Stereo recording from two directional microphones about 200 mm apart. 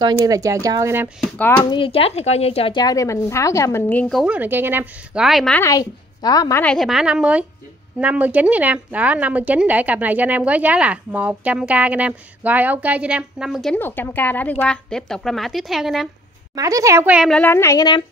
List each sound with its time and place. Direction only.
0.0 s a woman's voice: 20° right (ahead or behind)
1.2 s speech: 10° left (ahead or behind)
1.6 s speech: 25° left (ahead or behind); by 5.6 s centre (ahead or behind)
5.6 s a woman's voice: 15° left (ahead or behind)
6.6 s a woman's voice: 5° left (ahead or behind)
16.5 s a woman's voice: 15° right (ahead or behind)
17.4 s speech: 10° left (ahead or behind)